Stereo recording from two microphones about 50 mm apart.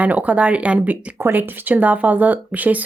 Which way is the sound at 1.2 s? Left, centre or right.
Right.